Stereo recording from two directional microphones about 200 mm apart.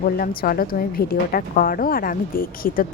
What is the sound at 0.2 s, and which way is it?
Speech, 45° left (ahead or behind).